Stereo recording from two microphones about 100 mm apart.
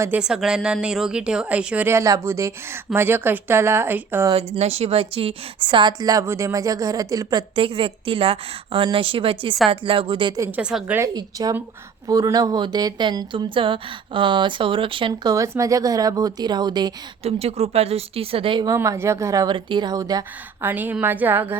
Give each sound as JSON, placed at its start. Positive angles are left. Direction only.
{"t": 0.1, "sound": "speech", "side_deg": -5}
{"t": 1.9, "sound": "speech", "side_deg": -30}
{"t": 4.4, "sound": "a woman's voice", "side_deg": -90}
{"t": 6.1, "sound": "a woman's voice", "side_deg": -30}
{"t": 7.5, "sound": "a woman's voice", "side_deg": -60}
{"t": 10.5, "sound": "speech", "side_deg": -10}
{"t": 11.1, "sound": "a woman's voice", "side_deg": -40}
{"t": 15.3, "sound": "a woman's voice", "side_deg": -35}
{"t": 17.2, "sound": "speech", "side_deg": -90}
{"t": 18.8, "sound": "a woman's voice", "side_deg": -30}
{"t": 19.5, "sound": "a woman's voice", "side_deg": -50}
{"t": 20.6, "sound": "speech", "side_deg": -20}